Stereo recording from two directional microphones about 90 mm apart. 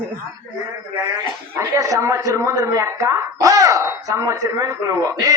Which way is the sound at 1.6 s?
35° right (ahead or behind).